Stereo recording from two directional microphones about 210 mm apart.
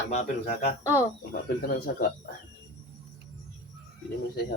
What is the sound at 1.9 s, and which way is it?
Speech, 45° left (ahead or behind).